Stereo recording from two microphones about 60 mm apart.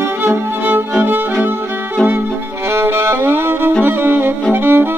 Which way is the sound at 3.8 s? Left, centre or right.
Right.